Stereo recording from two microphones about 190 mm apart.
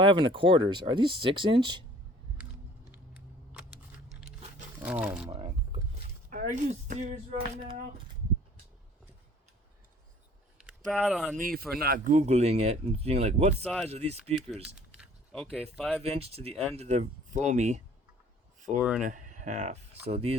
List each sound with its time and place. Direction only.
0.0 s speech: 25° right (ahead or behind)
3.6 s a sound: 5° right (ahead or behind)
4.8 s speech: 5° right (ahead or behind)
5.3 s a sound: 30° right (ahead or behind)
6.3 s speech: 40° right (ahead or behind)
10.7 s speech: centre (ahead or behind)
11.3 s speech: 50° right (ahead or behind)
14.8 s keys jangling: centre (ahead or behind)
15.7 s speech: centre (ahead or behind)
16.0 s speech: 30° right (ahead or behind)
18.8 s speech: centre (ahead or behind)
19.0 s speech: 45° right (ahead or behind)